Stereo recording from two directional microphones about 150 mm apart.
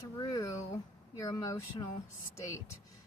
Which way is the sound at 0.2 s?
25° left (ahead or behind).